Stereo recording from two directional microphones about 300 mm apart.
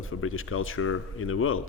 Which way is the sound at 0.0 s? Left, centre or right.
Left.